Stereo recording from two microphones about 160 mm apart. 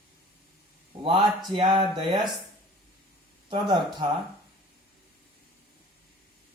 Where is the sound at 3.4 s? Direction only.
30° right (ahead or behind).